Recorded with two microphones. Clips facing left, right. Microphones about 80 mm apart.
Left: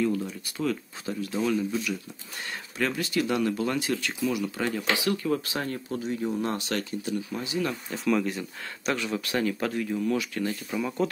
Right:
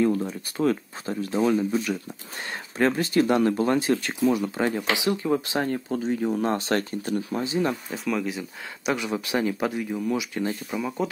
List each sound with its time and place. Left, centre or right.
0.0 s speech: right
7.9 s speech: centre